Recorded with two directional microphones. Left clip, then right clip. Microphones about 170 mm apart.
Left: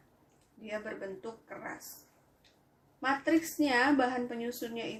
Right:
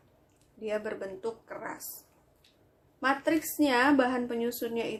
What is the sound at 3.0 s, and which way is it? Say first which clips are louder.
A woman's voice: right 2 dB; 55° right (ahead or behind).